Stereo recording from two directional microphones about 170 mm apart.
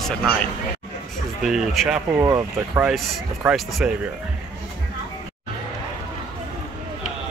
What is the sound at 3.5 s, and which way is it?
Speech, 5° right (ahead or behind).